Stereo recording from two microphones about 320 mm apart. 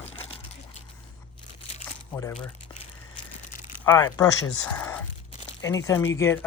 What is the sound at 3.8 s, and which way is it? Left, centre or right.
Speech, centre.